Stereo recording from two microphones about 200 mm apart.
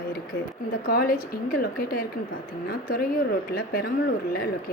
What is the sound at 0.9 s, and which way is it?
A woman's voice, 45° left (ahead or behind).